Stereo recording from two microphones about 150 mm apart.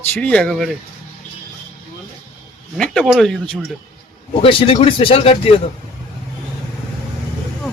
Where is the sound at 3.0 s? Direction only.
Centre (ahead or behind).